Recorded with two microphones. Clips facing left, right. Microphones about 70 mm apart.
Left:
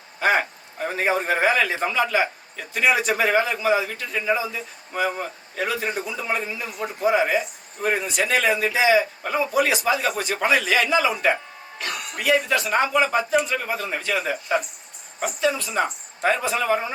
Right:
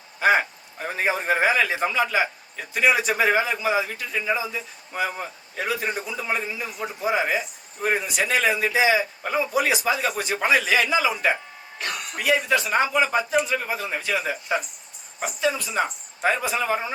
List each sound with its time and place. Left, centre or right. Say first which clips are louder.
0.2 s a man's voice: right 1 dB; centre
11.8 s a sound: even; left
12.1 s a man's voice: left 1 dB; centre